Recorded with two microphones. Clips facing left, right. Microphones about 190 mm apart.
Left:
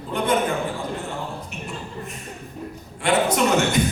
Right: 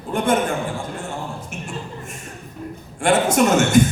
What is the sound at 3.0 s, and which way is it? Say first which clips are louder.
Speech: right 3 dB; 45° right (ahead or behind).